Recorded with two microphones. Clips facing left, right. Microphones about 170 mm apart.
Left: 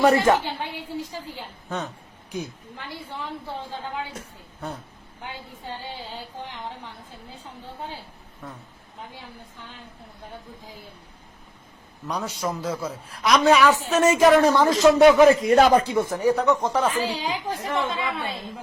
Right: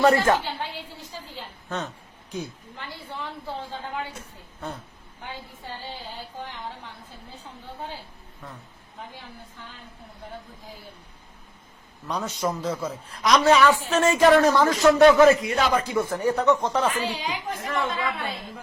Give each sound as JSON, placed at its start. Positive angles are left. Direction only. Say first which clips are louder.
{"t": 0.0, "sound": "a woman's voice", "louder": "left 1 dB", "side_deg": 15}
{"t": 12.0, "sound": "a woman's voice", "louder": "right 1 dB", "side_deg": 10}
{"t": 13.9, "sound": "a woman's voice", "louder": "left 2 dB", "side_deg": 15}
{"t": 15.4, "sound": "speech", "louder": "left 7 dB", "side_deg": 40}
{"t": 15.8, "sound": "a woman's voice", "louder": "left 2 dB", "side_deg": 25}
{"t": 16.0, "sound": "a woman's voice", "louder": "left 1 dB", "side_deg": 15}
{"t": 16.9, "sound": "speech", "louder": "left 2 dB", "side_deg": 35}
{"t": 17.7, "sound": "a woman's voice", "louder": "even", "side_deg": 25}